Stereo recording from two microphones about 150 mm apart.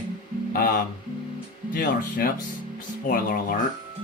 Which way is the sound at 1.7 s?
65° left (ahead or behind).